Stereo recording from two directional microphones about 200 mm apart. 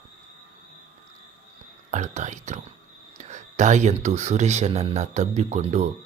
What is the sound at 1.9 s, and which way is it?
Speech, 35° right (ahead or behind).